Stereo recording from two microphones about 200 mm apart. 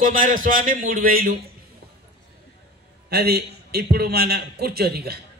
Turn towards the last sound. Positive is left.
turn(degrees=-50)  # may be behind; listen again after turning